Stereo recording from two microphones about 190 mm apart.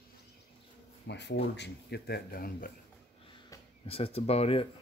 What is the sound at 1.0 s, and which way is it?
Speech, 65° left (ahead or behind).